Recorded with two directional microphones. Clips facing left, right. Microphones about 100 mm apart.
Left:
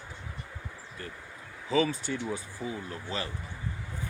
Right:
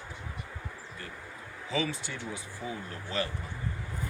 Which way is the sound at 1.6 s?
40° left (ahead or behind).